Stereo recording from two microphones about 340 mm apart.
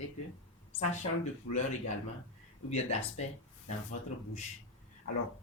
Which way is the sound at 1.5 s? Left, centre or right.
Left.